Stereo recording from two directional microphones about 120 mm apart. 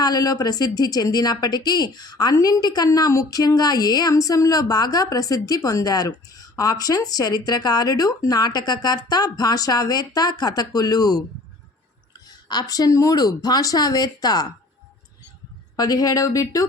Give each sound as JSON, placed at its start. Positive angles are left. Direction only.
{"t": 0.0, "sound": "a woman's voice", "side_deg": 30}
{"t": 12.3, "sound": "a woman's voice", "side_deg": 35}
{"t": 15.7, "sound": "speech", "side_deg": 30}